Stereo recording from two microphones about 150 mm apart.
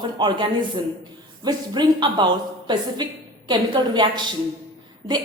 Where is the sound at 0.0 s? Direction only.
30° right (ahead or behind).